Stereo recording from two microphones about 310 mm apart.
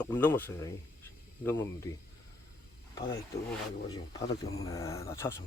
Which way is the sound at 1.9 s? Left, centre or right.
Centre.